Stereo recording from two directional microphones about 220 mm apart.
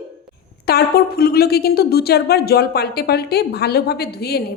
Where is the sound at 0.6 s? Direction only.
45° left (ahead or behind).